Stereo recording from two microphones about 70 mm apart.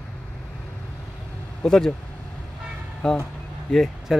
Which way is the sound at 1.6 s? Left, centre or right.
Centre.